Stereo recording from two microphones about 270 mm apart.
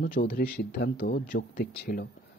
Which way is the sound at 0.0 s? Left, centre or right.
Left.